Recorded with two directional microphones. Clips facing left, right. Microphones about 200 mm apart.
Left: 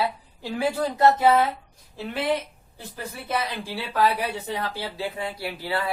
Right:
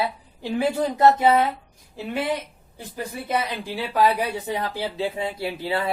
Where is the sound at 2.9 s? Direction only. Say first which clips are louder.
Right 3 dB; 15° right (ahead or behind).